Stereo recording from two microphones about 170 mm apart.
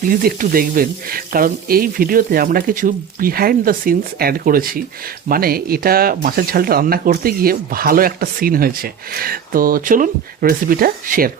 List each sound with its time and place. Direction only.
0.1 s speech: 55° right (ahead or behind)